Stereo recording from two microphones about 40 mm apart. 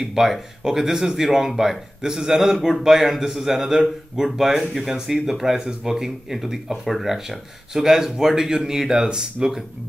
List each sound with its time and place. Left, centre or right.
0.0 s speech: centre